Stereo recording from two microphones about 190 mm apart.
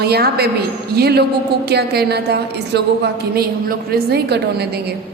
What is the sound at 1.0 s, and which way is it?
A woman's voice, 55° right (ahead or behind).